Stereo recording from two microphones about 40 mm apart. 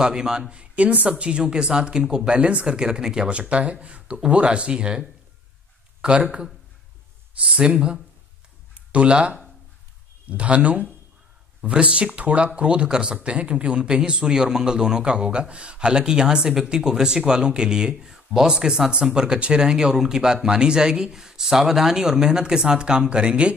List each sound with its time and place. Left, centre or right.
0.0 s speech: centre